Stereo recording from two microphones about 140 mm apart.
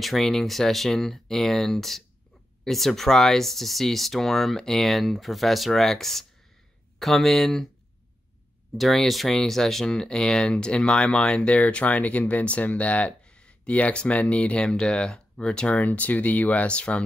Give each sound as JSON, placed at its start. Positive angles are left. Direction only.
{"t": 0.0, "sound": "speech", "side_deg": 0}
{"t": 8.7, "sound": "speech", "side_deg": 0}